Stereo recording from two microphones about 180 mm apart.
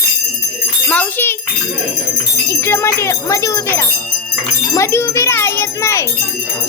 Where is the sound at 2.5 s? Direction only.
15° left (ahead or behind).